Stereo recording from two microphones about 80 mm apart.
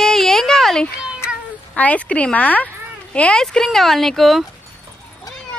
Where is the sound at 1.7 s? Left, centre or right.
Centre.